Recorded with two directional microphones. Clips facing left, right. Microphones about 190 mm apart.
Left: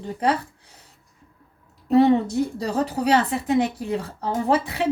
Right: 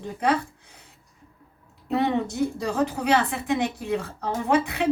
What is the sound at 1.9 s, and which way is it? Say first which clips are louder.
A woman's voice: left 7 dB; 35° left (ahead or behind).